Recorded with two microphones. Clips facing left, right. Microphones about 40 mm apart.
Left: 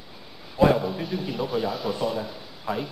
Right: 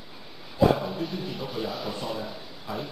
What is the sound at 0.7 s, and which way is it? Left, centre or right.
Speech, centre.